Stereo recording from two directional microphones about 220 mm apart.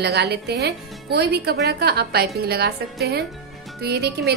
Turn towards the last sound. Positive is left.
turn(degrees=-50)  # may be behind; listen again after turning